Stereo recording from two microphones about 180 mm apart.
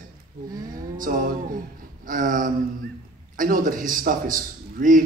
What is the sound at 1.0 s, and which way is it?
Music, 50° right (ahead or behind).